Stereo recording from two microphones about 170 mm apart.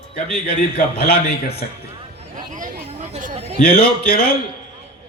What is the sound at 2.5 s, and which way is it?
Chatter, 50° right (ahead or behind).